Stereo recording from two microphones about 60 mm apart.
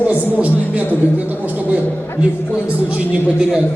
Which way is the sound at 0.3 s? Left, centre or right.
Right.